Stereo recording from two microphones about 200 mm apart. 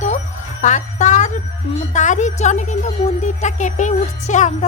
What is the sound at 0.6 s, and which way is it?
A woman's voice, 40° left (ahead or behind).